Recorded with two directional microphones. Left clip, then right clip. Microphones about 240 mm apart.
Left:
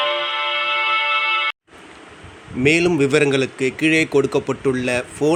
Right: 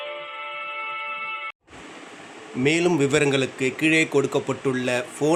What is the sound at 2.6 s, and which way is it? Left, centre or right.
Speech, centre.